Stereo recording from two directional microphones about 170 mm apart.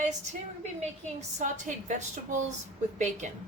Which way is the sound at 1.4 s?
45° right (ahead or behind).